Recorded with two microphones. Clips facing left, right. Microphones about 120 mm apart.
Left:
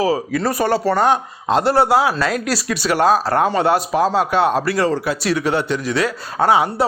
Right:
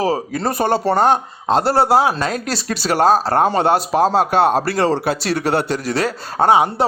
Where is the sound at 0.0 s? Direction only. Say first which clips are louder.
Left 1 dB; 30° right (ahead or behind).